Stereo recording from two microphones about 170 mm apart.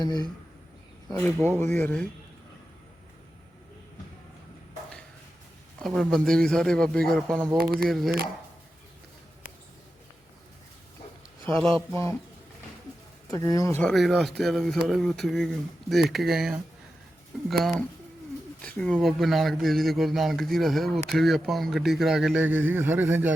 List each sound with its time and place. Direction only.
0.0 s speech: 25° left (ahead or behind)
1.2 s speech: 10° left (ahead or behind)
5.8 s a man's voice: centre (ahead or behind)
7.6 s speech: 65° right (ahead or behind)
7.9 s a man's voice: centre (ahead or behind)
11.6 s a man's voice: centre (ahead or behind)
13.3 s speech: 20° left (ahead or behind)
13.8 s a man's voice: centre (ahead or behind)
17.6 s a man's voice: centre (ahead or behind)